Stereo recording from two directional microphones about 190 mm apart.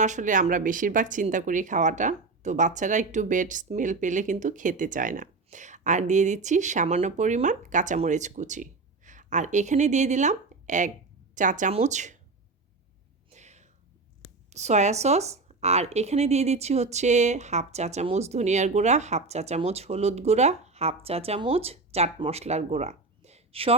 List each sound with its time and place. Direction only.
0.0 s speech: 40° right (ahead or behind)
13.3 s a sound: 35° right (ahead or behind)
14.5 s speech: 35° right (ahead or behind)